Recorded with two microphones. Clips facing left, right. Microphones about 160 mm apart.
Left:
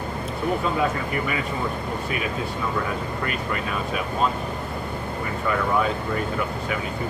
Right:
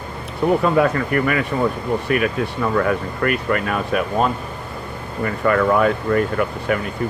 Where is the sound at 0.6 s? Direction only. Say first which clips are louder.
Right 7 dB; 65° right (ahead or behind).